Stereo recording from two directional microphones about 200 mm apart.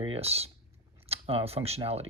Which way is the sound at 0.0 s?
30° right (ahead or behind).